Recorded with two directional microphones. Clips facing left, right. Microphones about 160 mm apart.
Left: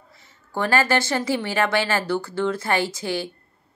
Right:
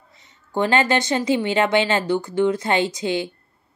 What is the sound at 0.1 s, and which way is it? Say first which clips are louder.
A woman's voice: right 4 dB; 20° right (ahead or behind).